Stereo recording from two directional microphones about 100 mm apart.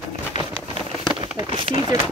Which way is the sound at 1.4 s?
60° right (ahead or behind).